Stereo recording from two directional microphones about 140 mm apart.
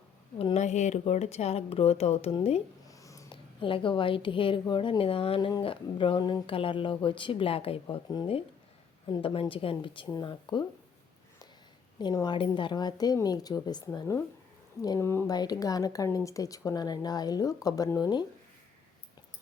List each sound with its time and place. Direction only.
0.3 s speech: 45° left (ahead or behind)
2.8 s a sound: 25° left (ahead or behind)
3.3 s speech: 40° left (ahead or behind)
11.9 s speech: 30° left (ahead or behind)